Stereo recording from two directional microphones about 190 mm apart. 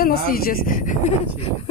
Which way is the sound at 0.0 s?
50° left (ahead or behind).